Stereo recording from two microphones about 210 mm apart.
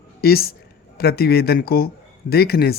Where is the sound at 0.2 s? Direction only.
45° left (ahead or behind).